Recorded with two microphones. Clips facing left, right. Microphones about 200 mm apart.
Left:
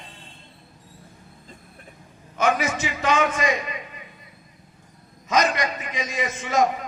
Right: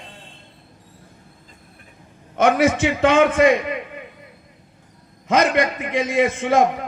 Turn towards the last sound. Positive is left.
turn(degrees=-55)  # may be behind; listen again after turning